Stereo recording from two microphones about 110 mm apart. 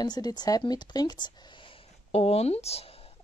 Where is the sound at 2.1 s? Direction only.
70° left (ahead or behind).